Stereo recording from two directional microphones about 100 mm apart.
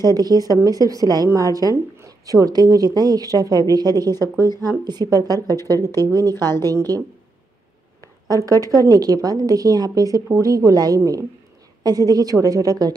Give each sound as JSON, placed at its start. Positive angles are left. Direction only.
{"t": 0.0, "sound": "speech", "side_deg": -40}
{"t": 5.5, "sound": "a woman's voice", "side_deg": 30}
{"t": 8.0, "sound": "a sound", "side_deg": 30}
{"t": 8.5, "sound": "speech", "side_deg": -35}